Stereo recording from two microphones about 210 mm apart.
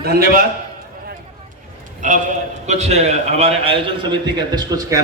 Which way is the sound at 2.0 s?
35° right (ahead or behind).